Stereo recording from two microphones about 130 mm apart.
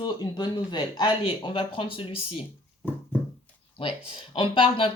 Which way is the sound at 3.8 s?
45° left (ahead or behind).